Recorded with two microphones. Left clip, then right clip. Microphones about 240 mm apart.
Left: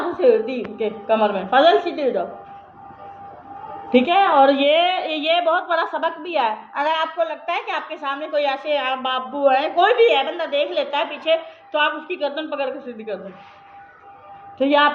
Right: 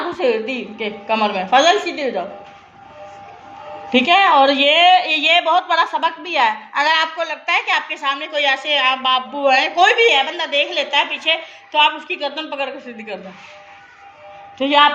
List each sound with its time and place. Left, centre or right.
0.2 s a woman's voice: right
3.8 s a woman's voice: right
14.6 s a woman's voice: right